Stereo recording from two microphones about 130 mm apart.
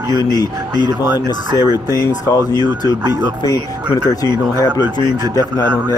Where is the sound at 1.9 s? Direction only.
25° left (ahead or behind).